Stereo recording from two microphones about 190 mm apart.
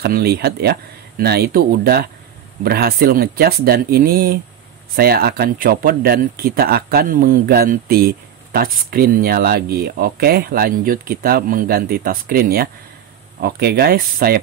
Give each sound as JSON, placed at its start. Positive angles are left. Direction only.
{"t": 0.0, "sound": "speech", "side_deg": -55}